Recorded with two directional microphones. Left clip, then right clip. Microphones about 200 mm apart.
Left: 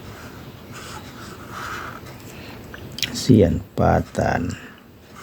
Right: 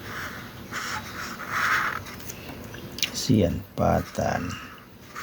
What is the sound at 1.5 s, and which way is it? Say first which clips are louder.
Mechanisms: right 8 dB; 5° right (ahead or behind).